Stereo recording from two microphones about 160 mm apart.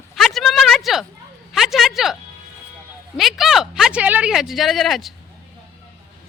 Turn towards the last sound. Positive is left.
turn(degrees=0)  # may be behind; listen again after turning